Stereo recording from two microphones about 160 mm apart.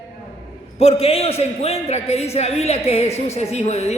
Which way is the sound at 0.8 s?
40° left (ahead or behind).